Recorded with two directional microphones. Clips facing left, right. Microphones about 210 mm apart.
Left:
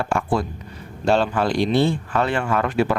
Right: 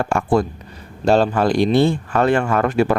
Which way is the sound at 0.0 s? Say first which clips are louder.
Right 4 dB; 50° right (ahead or behind).